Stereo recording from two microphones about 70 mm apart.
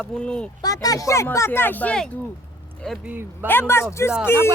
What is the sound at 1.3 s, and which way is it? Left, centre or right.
Speech, left.